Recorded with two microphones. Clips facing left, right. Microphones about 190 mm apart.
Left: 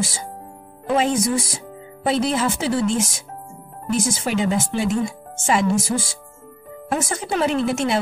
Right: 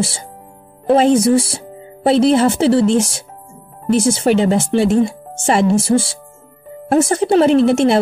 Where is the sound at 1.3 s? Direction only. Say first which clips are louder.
Right 9 dB; 35° right (ahead or behind).